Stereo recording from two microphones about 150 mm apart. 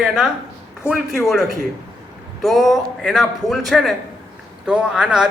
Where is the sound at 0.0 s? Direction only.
5° right (ahead or behind).